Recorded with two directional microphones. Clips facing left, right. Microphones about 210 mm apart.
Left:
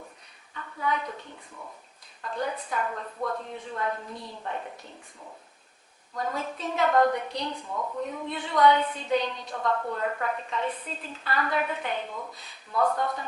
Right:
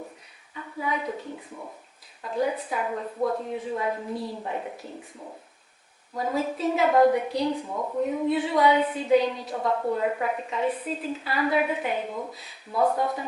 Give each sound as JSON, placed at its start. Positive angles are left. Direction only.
{"t": 0.5, "sound": "a sound", "side_deg": -10}
{"t": 2.2, "sound": "a woman's voice", "side_deg": -10}
{"t": 6.1, "sound": "a woman's voice", "side_deg": -5}
{"t": 12.7, "sound": "speech", "side_deg": -20}